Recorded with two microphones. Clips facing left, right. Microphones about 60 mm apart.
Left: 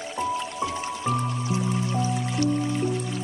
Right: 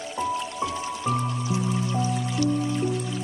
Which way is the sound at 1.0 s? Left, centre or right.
Centre.